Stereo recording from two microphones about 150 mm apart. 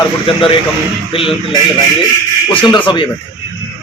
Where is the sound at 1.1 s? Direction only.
35° left (ahead or behind).